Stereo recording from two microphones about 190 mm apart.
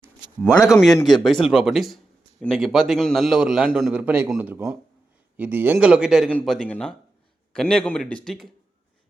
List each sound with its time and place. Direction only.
0.0 s a sound: centre (ahead or behind)
0.9 s speech: 20° left (ahead or behind)
1.2 s a man's voice: centre (ahead or behind)